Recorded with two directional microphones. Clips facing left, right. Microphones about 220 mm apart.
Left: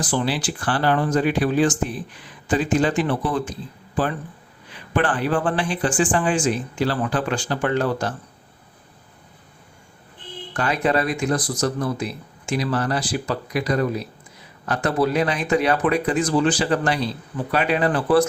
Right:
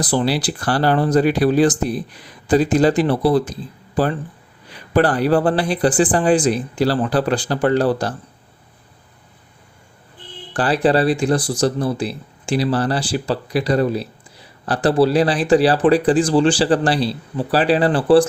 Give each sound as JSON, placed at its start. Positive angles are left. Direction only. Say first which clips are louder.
{"t": 0.0, "sound": "speech", "louder": "right 4 dB", "side_deg": -35}
{"t": 10.5, "sound": "speech", "louder": "right 5 dB", "side_deg": -35}